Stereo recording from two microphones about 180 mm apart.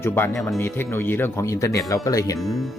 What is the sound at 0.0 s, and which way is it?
Speech, 15° left (ahead or behind).